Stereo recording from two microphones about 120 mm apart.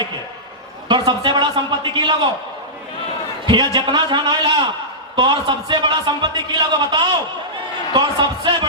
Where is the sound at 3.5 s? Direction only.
40° right (ahead or behind).